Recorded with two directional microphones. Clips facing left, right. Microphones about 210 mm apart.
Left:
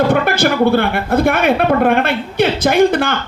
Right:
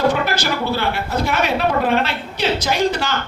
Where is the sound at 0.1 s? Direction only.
55° left (ahead or behind).